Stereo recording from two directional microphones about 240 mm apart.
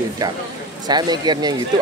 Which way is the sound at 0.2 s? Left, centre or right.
Centre.